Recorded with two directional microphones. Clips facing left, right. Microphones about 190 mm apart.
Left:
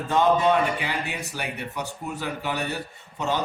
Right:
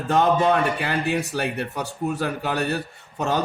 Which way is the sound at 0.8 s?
65° right (ahead or behind).